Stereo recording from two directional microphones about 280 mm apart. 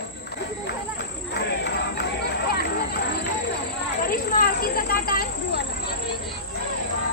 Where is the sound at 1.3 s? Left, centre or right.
Left.